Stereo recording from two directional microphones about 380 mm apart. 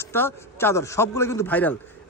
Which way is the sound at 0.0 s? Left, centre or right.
Centre.